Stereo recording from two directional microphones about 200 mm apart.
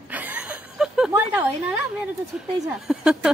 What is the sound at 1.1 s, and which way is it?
A woman's voice, 10° right (ahead or behind).